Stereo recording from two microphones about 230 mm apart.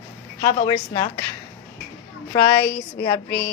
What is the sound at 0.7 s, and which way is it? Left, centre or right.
Mantra, centre.